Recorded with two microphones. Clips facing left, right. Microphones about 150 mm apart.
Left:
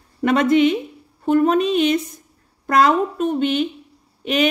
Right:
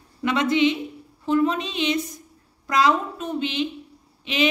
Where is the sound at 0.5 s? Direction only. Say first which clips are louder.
Left 5 dB; 55° left (ahead or behind).